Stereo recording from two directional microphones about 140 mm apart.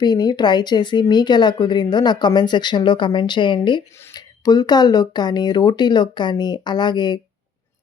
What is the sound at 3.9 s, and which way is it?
Speech, 20° left (ahead or behind).